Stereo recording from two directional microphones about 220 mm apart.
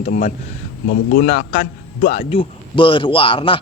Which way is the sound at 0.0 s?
35° left (ahead or behind).